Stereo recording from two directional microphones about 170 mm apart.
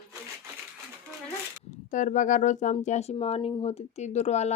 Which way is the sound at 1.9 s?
50° left (ahead or behind).